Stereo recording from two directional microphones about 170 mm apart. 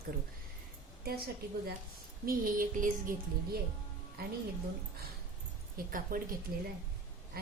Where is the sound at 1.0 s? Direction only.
65° right (ahead or behind).